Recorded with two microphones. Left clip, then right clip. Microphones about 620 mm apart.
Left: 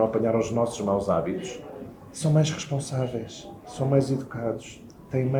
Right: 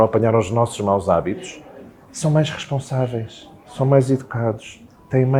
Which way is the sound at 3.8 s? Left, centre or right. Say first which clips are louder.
Right 9 dB; right.